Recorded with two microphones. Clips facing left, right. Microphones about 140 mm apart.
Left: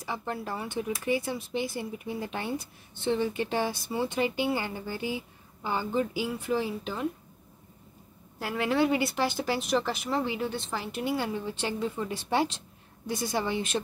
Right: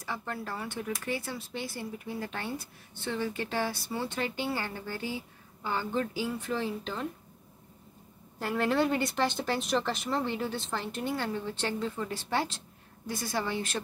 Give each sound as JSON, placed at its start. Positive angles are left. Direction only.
{"t": 0.0, "sound": "speech", "side_deg": 20}
{"t": 8.4, "sound": "a woman's voice", "side_deg": 5}